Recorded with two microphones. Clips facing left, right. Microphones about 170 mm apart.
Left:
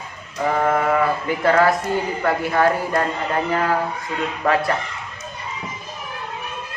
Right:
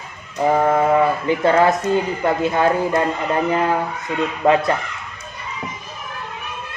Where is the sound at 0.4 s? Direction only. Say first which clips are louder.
Right 3 dB; 20° right (ahead or behind).